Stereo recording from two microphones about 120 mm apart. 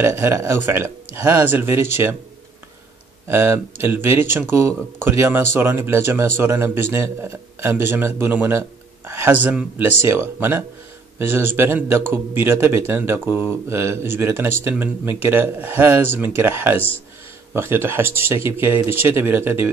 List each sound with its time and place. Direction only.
0.0 s speech: 20° right (ahead or behind)
3.3 s speech: 20° right (ahead or behind)